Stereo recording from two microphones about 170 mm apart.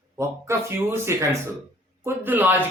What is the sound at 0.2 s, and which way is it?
Speech, 15° right (ahead or behind).